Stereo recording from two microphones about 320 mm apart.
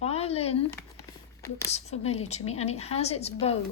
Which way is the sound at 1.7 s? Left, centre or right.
Centre.